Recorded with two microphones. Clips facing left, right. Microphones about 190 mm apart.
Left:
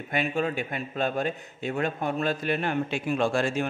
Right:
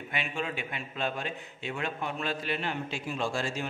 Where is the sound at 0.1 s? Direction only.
45° left (ahead or behind).